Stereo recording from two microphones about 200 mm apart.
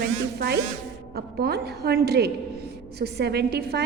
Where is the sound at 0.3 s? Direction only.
55° right (ahead or behind).